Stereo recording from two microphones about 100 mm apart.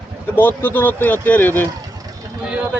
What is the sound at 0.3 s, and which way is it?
Speech, 20° left (ahead or behind).